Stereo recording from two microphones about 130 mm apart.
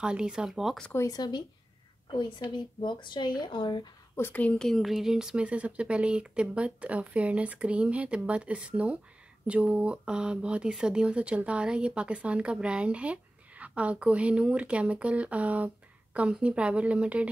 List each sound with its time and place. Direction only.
0.0 s speech: 5° right (ahead or behind)
0.9 s speech: 30° left (ahead or behind)
2.1 s speech: 40° left (ahead or behind)
4.2 s speech: 15° left (ahead or behind); by 17.3 s 10° right (ahead or behind)